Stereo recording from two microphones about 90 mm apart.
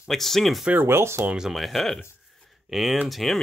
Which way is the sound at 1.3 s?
5° right (ahead or behind).